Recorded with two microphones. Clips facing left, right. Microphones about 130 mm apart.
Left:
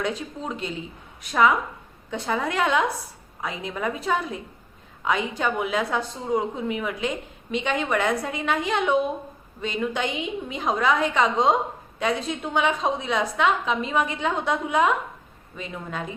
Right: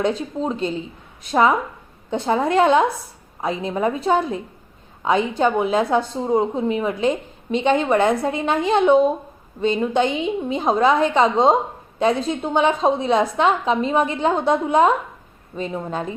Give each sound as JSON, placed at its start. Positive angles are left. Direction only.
{"t": 0.0, "sound": "a woman's voice", "side_deg": -25}